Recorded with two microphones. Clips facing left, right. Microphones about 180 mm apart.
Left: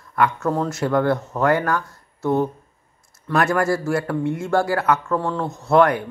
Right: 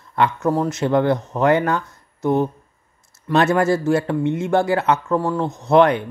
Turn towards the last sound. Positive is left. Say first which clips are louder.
# right 2 dB
turn(degrees=-20)  # may be behind; listen again after turning